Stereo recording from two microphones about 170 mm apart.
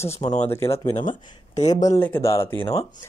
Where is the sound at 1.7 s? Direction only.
20° left (ahead or behind).